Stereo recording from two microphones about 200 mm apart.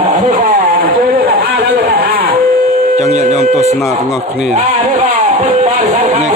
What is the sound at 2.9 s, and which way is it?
Speech, 35° right (ahead or behind).